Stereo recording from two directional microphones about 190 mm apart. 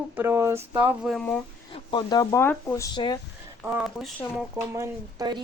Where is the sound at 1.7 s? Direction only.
25° left (ahead or behind).